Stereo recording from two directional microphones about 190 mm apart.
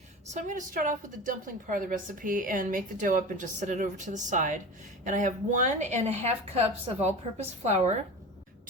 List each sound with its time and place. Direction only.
0.3 s a woman's voice: 40° right (ahead or behind)